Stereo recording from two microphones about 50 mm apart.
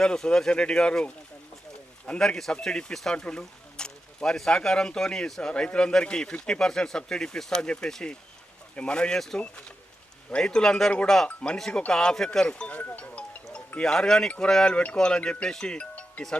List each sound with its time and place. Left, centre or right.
0.0 s speech: centre
2.2 s speech: centre
10.3 s speech: centre
11.3 s speech: left
11.9 s speech: centre
13.8 s speech: centre